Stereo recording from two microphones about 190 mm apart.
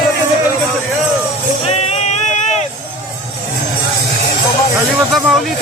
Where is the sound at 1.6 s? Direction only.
35° left (ahead or behind).